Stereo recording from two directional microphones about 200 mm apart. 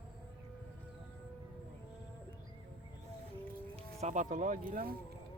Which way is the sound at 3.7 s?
35° right (ahead or behind).